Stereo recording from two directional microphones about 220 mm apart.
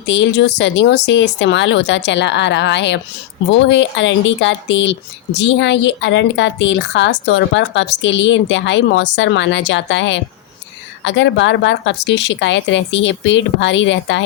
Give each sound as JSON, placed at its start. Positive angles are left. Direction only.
{"t": 0.0, "sound": "speech", "side_deg": 50}